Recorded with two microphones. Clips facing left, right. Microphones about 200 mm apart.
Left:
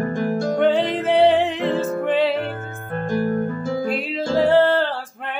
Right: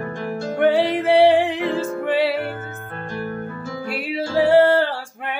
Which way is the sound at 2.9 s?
45° left (ahead or behind).